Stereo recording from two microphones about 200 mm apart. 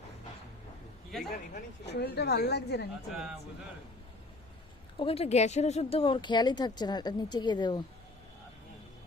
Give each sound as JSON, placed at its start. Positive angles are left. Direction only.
{"t": 1.1, "sound": "speech", "side_deg": 0}
{"t": 1.8, "sound": "a woman's voice", "side_deg": 55}
{"t": 3.1, "sound": "speech", "side_deg": -5}
{"t": 4.9, "sound": "speech", "side_deg": 30}